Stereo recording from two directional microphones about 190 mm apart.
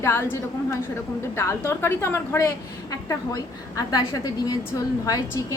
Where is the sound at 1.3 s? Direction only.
15° left (ahead or behind).